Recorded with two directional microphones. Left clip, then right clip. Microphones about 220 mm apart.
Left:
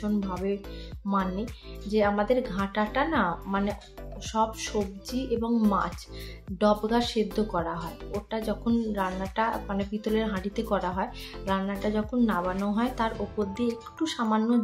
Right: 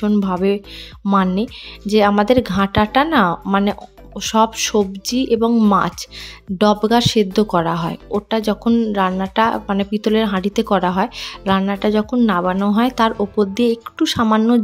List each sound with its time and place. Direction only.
0.0 s speech: 45° right (ahead or behind)